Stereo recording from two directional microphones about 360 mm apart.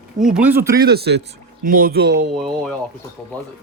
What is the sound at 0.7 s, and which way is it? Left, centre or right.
Speech, right.